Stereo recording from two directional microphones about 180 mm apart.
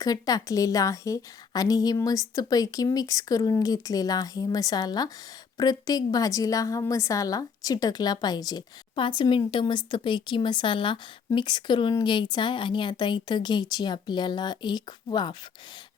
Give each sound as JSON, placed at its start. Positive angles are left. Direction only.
{"t": 0.0, "sound": "a woman's voice", "side_deg": 20}